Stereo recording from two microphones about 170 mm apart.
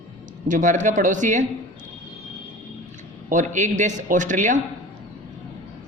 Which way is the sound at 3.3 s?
45° right (ahead or behind).